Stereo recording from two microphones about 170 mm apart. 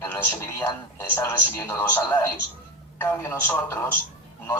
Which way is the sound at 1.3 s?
15° left (ahead or behind).